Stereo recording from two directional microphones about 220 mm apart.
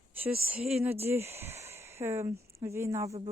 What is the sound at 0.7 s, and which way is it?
Speech, centre (ahead or behind).